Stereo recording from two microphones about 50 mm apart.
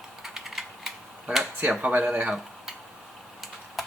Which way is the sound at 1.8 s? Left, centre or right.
Right.